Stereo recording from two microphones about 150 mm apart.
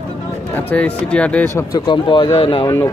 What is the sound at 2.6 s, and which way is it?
Speech, 15° left (ahead or behind).